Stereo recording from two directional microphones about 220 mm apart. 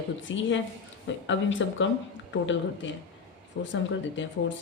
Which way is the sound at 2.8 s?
55° left (ahead or behind).